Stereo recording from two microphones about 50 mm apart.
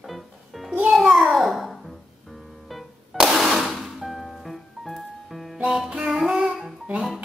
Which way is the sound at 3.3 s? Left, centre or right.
Centre.